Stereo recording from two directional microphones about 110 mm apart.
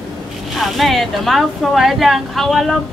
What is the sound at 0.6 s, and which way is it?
Speech, centre (ahead or behind).